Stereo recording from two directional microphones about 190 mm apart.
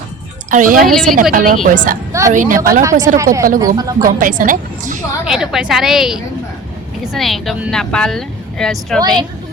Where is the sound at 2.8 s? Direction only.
15° right (ahead or behind).